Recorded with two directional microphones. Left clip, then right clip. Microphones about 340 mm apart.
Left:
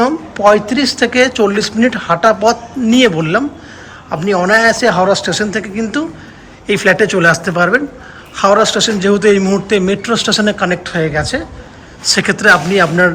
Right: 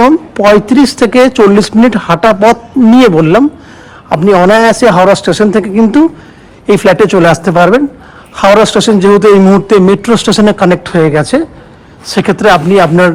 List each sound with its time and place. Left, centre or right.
0.0 s a man's voice: centre